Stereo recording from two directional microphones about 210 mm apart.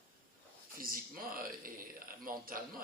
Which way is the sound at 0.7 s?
45° right (ahead or behind).